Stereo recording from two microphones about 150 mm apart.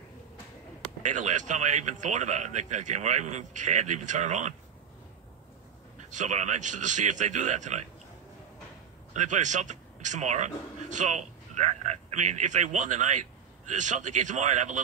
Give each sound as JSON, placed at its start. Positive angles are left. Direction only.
{"t": 1.0, "sound": "speech", "side_deg": -55}
{"t": 6.0, "sound": "speech", "side_deg": -55}
{"t": 9.1, "sound": "speech", "side_deg": -55}